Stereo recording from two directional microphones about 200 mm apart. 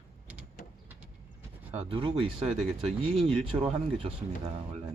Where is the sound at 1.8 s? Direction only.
25° right (ahead or behind).